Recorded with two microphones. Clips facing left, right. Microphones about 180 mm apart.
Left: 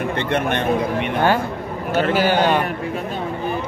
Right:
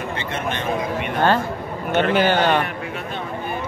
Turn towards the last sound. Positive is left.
turn(degrees=10)  # may be behind; listen again after turning